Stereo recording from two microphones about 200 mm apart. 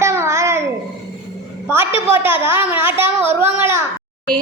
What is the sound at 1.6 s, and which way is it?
A woman's voice, 10° right (ahead or behind).